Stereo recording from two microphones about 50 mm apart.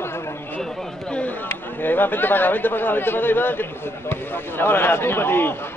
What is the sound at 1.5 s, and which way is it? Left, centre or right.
A man's voice, left.